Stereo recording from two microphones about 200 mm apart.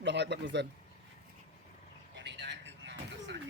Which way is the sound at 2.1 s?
65° right (ahead or behind).